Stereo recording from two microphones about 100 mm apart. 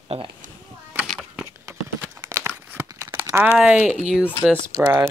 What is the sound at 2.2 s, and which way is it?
Crumpling, 25° right (ahead or behind).